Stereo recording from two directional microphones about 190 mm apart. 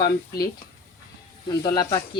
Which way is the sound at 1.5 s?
20° left (ahead or behind).